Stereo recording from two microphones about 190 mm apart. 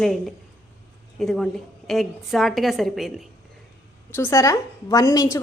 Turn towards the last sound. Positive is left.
turn(degrees=15)  # may be behind; listen again after turning